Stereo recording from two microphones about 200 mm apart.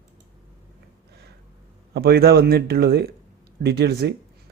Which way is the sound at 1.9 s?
50° right (ahead or behind).